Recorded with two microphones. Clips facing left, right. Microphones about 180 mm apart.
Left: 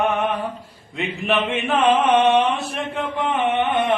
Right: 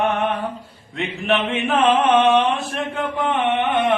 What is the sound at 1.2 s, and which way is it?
Speech, centre (ahead or behind).